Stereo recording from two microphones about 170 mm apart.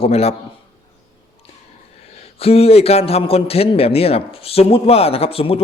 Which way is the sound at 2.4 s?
35° left (ahead or behind).